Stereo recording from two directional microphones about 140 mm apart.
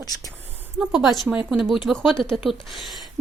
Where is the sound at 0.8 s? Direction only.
5° right (ahead or behind).